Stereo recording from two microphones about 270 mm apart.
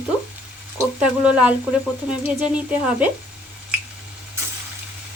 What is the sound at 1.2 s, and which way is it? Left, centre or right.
Speech, centre.